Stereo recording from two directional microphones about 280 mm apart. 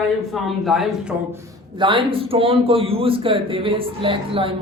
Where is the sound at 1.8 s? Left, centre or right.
Centre.